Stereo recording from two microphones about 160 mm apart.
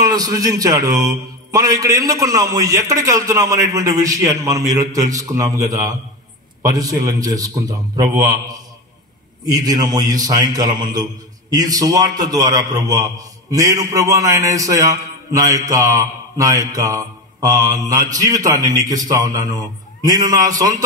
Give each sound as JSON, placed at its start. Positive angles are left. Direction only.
{"t": 0.0, "sound": "a man's voice", "side_deg": -25}